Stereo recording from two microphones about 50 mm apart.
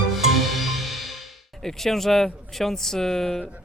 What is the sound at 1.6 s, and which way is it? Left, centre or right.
Speech, centre.